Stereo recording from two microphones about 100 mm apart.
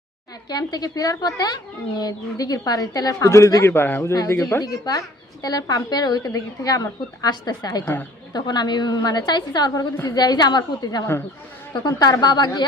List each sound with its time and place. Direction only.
0.4 s a woman's voice: 40° left (ahead or behind)
4.6 s a woman's voice: 35° left (ahead or behind)